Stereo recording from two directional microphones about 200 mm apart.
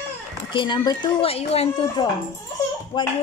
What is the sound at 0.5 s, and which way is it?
Speech, 20° left (ahead or behind).